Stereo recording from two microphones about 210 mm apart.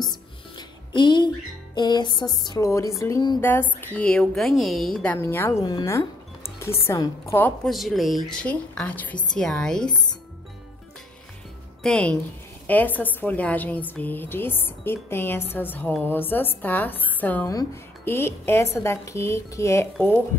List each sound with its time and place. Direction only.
0.1 s music: 20° left (ahead or behind)
1.8 s a sound: 20° left (ahead or behind)
3.0 s a woman's voice: 15° left (ahead or behind)
11.8 s a woman's voice: 5° left (ahead or behind)